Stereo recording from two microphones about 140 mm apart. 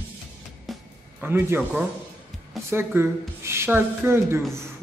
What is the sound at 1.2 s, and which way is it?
Speech, 15° right (ahead or behind).